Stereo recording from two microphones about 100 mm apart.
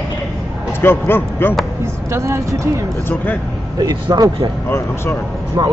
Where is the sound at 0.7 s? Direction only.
25° left (ahead or behind).